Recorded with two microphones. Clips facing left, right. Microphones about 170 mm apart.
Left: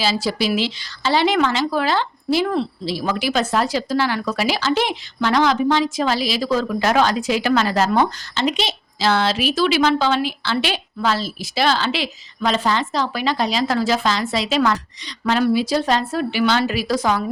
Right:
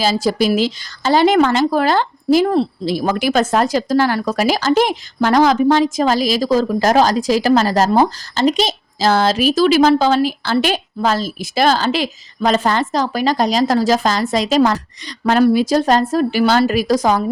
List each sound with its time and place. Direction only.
0.0 s speech: 45° right (ahead or behind)